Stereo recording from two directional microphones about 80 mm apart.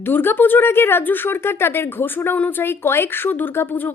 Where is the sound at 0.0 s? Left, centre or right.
Left.